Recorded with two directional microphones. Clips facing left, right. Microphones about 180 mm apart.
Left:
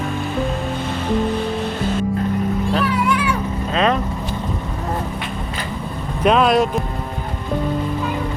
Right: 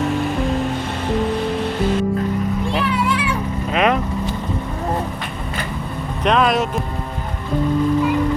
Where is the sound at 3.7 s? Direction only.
15° right (ahead or behind).